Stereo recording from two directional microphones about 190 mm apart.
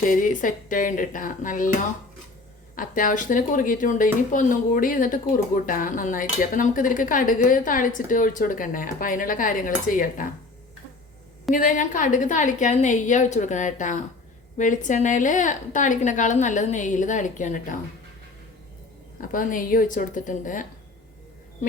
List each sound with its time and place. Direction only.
0.0 s speech: 45° left (ahead or behind)
2.7 s speech: 45° left (ahead or behind)
11.5 s a woman's voice: 45° left (ahead or behind)
19.2 s speech: 45° left (ahead or behind)